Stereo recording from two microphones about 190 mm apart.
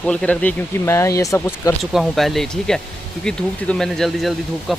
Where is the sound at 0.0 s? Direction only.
5° left (ahead or behind).